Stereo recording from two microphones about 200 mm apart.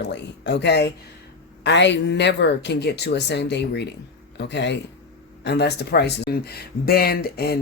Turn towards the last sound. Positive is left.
turn(degrees=50)  # may be behind; listen again after turning